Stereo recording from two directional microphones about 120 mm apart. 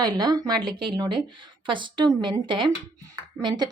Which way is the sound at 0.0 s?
35° right (ahead or behind).